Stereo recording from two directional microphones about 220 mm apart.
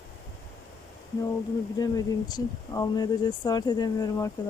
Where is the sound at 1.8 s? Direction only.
15° left (ahead or behind).